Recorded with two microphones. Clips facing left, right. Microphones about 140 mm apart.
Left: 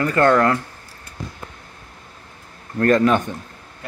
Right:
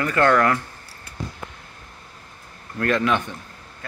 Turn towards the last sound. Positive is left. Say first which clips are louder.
# left 5 dB
turn(degrees=45)  # may be behind; listen again after turning